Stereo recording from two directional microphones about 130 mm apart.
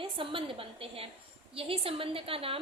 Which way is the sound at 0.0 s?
40° right (ahead or behind).